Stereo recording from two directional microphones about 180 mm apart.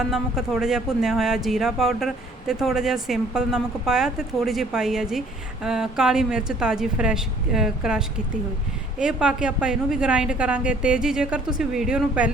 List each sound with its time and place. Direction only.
0.0 s speech: 5° right (ahead or behind)